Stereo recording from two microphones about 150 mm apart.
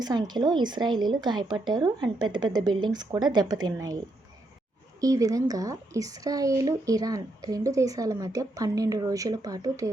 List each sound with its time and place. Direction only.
0.0 s speech: 25° right (ahead or behind)
4.9 s speech: 25° right (ahead or behind)